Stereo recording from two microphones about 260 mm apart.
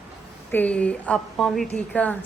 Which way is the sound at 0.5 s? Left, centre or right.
Centre.